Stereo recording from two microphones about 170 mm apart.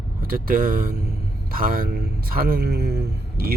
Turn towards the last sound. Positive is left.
turn(degrees=-70)  # may be behind; listen again after turning